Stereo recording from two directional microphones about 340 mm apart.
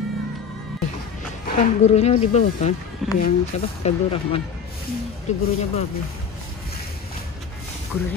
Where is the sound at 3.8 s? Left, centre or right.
Centre.